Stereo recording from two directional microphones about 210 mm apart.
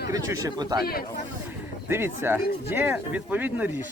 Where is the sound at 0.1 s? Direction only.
15° right (ahead or behind).